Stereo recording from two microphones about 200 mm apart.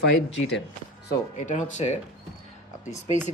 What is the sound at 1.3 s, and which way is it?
Speech, 40° left (ahead or behind).